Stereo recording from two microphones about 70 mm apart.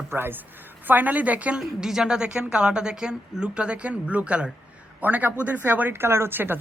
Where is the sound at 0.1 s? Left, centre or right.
Right.